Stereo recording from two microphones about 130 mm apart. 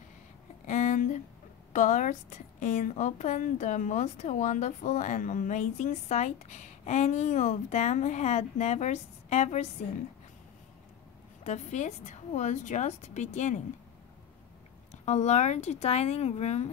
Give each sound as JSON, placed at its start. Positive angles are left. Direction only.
{"t": 0.7, "sound": "a sound", "side_deg": 70}
{"t": 1.7, "sound": "a woman's voice", "side_deg": 75}
{"t": 11.4, "sound": "a woman's voice", "side_deg": 65}
{"t": 14.9, "sound": "a woman's voice", "side_deg": 60}